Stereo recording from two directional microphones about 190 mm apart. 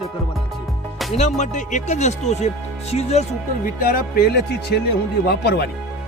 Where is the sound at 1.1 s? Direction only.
35° left (ahead or behind).